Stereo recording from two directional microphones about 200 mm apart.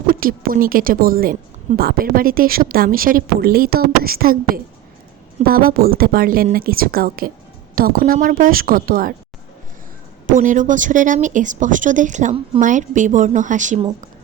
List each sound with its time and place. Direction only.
0.1 s a woman's voice: 45° right (ahead or behind)
10.2 s a woman's voice: 40° right (ahead or behind)